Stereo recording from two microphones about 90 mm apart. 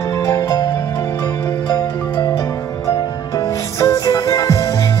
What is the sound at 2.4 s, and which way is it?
Music, 40° left (ahead or behind).